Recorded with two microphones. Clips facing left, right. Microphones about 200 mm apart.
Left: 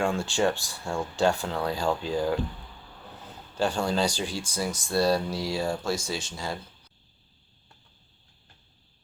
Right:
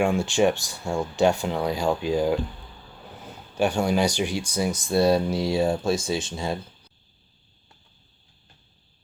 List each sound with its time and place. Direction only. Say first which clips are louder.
0.0 s speech: right 5 dB; 15° right (ahead or behind)
3.6 s speech: right 4 dB; 15° right (ahead or behind)